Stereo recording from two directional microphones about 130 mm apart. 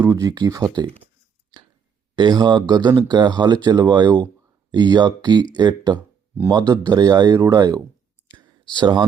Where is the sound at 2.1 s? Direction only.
35° right (ahead or behind).